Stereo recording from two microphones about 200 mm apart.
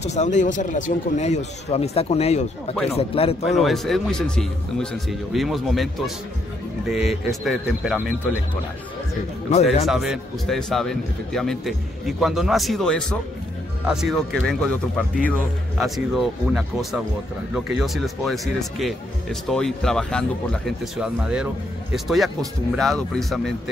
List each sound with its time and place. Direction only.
0.0 s speech: 35° left (ahead or behind)
3.5 s a man's voice: centre (ahead or behind)
9.5 s speech: 35° left (ahead or behind)
9.8 s a man's voice: centre (ahead or behind)